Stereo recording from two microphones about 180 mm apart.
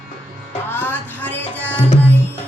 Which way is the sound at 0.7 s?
10° left (ahead or behind).